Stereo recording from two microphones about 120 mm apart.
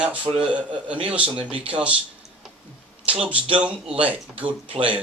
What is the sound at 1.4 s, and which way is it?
Speech, 45° right (ahead or behind).